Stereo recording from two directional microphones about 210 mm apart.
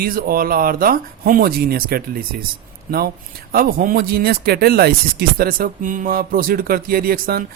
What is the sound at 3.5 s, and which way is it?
A man's voice, 45° right (ahead or behind).